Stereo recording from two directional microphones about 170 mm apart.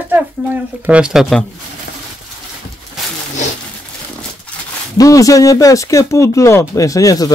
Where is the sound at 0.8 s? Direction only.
5° right (ahead or behind).